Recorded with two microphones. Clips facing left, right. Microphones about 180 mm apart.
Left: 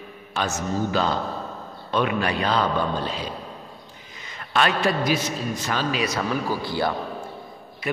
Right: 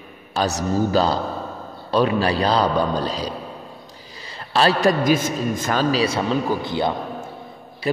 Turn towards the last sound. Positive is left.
turn(degrees=-20)  # may be behind; listen again after turning